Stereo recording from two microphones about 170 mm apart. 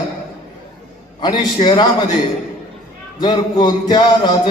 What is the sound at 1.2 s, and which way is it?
Music, 25° left (ahead or behind).